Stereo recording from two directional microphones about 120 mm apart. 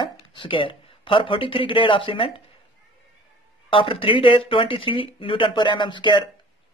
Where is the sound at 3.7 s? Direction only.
50° left (ahead or behind).